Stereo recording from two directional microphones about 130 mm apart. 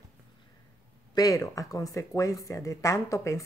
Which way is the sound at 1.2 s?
25° left (ahead or behind).